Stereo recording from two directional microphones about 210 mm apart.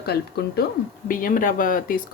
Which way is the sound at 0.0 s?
50° left (ahead or behind).